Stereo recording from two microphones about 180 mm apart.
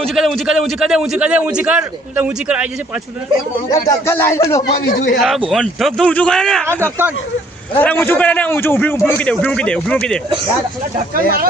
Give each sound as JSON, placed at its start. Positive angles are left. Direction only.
{"t": 0.2, "sound": "a man's voice", "side_deg": -5}
{"t": 3.8, "sound": "a man's voice", "side_deg": 15}
{"t": 4.7, "sound": "speech", "side_deg": 50}
{"t": 5.5, "sound": "a man's voice", "side_deg": 0}
{"t": 6.7, "sound": "speech", "side_deg": -15}
{"t": 7.8, "sound": "a man's voice", "side_deg": 10}